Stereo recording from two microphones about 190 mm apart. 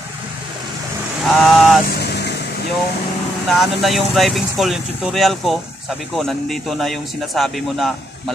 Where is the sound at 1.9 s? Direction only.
60° left (ahead or behind).